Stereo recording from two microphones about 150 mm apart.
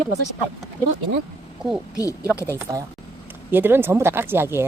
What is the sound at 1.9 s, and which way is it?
Speech, 25° left (ahead or behind).